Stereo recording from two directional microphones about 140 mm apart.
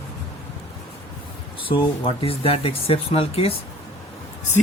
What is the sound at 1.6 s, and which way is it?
Speech, 40° left (ahead or behind).